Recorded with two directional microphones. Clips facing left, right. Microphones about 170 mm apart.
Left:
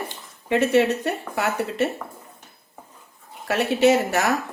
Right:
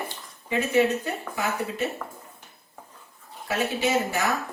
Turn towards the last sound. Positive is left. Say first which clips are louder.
# left 7 dB
turn(degrees=70)  # may be behind; listen again after turning